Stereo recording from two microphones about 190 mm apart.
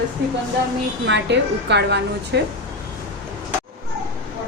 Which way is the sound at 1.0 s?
65° right (ahead or behind).